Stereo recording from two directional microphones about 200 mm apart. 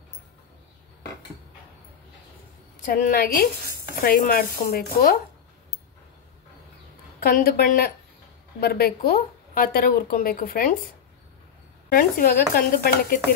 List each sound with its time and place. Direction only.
2.8 s a woman's voice: 40° left (ahead or behind)
7.2 s a woman's voice: 50° left (ahead or behind)
11.9 s a woman's voice: 45° left (ahead or behind)